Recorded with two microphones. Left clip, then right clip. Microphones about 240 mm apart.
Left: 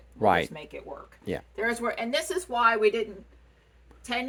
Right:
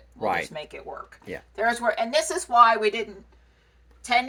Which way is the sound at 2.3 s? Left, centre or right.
Centre.